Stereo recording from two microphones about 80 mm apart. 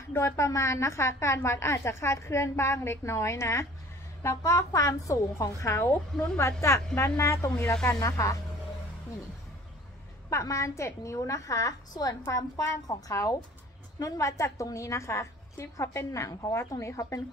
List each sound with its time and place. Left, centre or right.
0.1 s a woman's voice: left
5.9 s a woman's voice: centre
7.2 s a woman's voice: left
7.7 s a woman's voice: centre
10.3 s a woman's voice: left